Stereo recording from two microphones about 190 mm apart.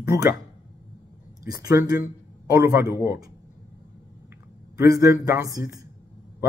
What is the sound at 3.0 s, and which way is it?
Speech, 15° right (ahead or behind).